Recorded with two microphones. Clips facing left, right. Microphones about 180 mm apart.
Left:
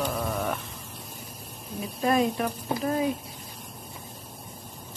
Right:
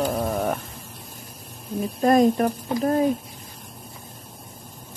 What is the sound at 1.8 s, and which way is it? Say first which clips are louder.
Speech: right 7 dB; 45° right (ahead or behind).